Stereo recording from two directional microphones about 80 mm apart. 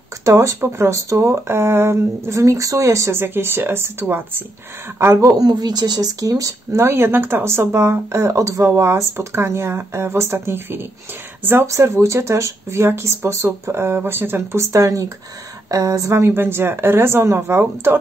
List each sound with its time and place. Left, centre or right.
0.2 s speech: right
5.1 s speech: right